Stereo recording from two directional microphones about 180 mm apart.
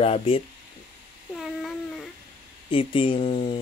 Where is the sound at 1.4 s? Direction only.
Centre (ahead or behind).